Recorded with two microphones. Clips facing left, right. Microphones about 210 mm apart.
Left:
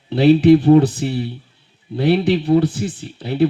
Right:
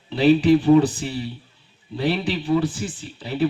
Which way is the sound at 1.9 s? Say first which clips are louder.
Left 7 dB; 55° left (ahead or behind).